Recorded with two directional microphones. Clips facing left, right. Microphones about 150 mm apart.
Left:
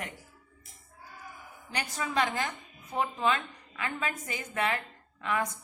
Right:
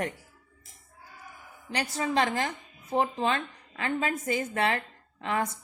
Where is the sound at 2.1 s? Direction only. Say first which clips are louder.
Right 2 dB; 30° right (ahead or behind).